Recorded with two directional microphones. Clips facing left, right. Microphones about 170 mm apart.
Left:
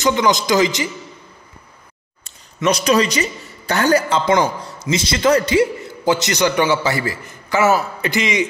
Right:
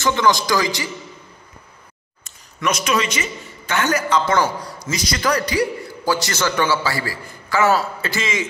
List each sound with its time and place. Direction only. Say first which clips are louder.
0.0 s a man's voice: left 1 dB; 15° left (ahead or behind)
2.2 s a woman's voice: left 5 dB; 30° left (ahead or behind)